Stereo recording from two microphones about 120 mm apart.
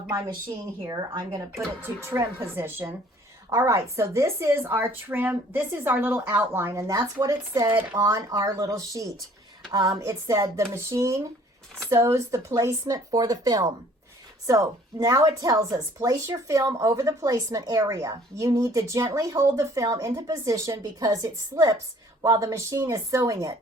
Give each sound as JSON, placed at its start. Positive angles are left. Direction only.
{"t": 0.9, "sound": "speech", "side_deg": -30}
{"t": 1.8, "sound": "a woman's voice", "side_deg": -20}
{"t": 7.7, "sound": "a woman's voice", "side_deg": -15}
{"t": 7.9, "sound": "a woman's voice", "side_deg": -30}